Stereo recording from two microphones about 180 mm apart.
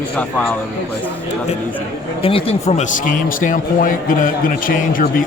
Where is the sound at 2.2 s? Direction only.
30° left (ahead or behind); by 5.1 s 50° left (ahead or behind).